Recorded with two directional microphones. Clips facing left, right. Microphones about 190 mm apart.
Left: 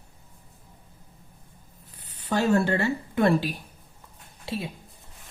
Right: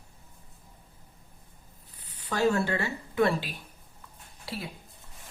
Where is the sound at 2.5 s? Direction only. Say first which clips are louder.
Left 6 dB; 50° left (ahead or behind).